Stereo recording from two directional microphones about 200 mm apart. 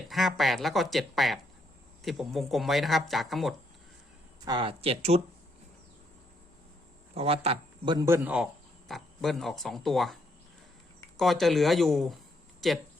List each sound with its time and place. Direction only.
0.1 s speech: centre (ahead or behind)
4.4 s speech: 25° right (ahead or behind)
7.1 s speech: 30° right (ahead or behind)
8.0 s speech: 10° right (ahead or behind)
11.2 s speech: centre (ahead or behind)